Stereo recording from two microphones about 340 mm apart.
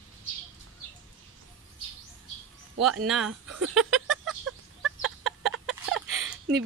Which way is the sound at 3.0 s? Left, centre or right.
Centre.